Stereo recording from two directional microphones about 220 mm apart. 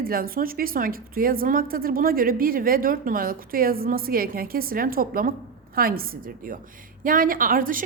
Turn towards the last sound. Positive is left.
turn(degrees=-40)  # may be behind; listen again after turning